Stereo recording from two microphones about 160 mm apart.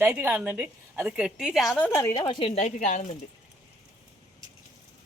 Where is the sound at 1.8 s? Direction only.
15° left (ahead or behind).